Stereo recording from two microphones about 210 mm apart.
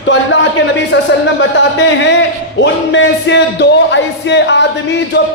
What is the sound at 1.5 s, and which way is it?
Speech, 60° left (ahead or behind).